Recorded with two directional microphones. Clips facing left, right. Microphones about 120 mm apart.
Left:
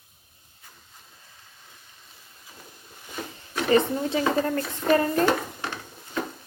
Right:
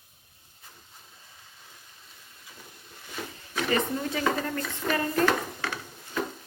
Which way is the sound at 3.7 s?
30° left (ahead or behind).